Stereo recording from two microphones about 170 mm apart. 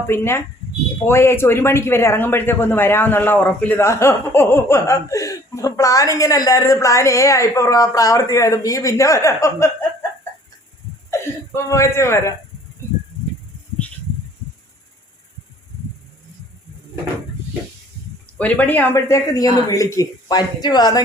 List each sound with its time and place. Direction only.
0.1 s speech: 15° left (ahead or behind)
11.1 s speech: 15° left (ahead or behind)
18.3 s speech: 10° left (ahead or behind); by 21.0 s 25° left (ahead or behind)